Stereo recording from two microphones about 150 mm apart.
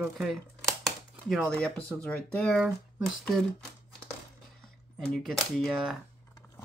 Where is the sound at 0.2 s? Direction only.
Centre (ahead or behind).